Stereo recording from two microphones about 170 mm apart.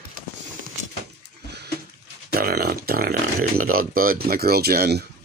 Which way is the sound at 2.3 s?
65° right (ahead or behind).